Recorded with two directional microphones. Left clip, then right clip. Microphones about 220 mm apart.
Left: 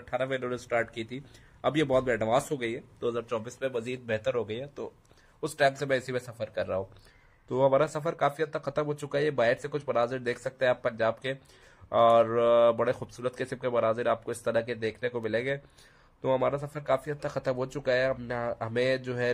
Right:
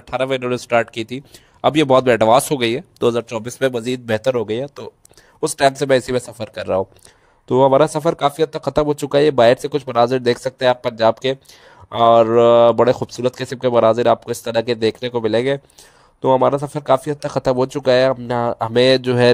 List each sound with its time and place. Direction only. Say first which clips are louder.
0.1 s speech: right 11 dB; 40° right (ahead or behind)